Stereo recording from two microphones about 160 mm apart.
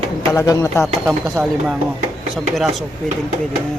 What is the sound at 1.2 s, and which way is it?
Speech, 5° right (ahead or behind).